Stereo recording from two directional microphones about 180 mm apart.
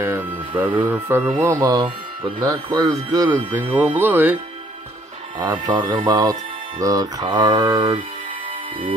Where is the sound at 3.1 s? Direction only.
20° right (ahead or behind).